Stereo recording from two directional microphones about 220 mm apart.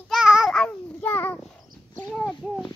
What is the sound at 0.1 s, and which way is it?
Child singing, 5° right (ahead or behind).